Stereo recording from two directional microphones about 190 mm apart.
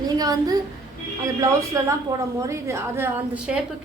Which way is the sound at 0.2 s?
20° right (ahead or behind).